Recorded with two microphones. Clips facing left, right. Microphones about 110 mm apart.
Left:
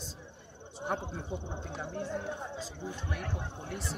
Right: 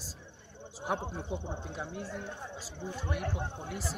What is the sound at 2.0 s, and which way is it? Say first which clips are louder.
Speech: left 4 dB; 20° left (ahead or behind).